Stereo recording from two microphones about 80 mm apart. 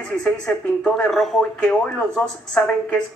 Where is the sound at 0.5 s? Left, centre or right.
Centre.